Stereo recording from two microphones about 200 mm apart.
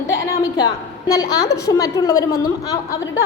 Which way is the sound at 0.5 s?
20° left (ahead or behind).